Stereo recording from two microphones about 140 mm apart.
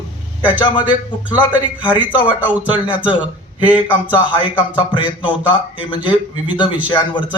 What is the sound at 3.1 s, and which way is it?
Speech, 35° left (ahead or behind).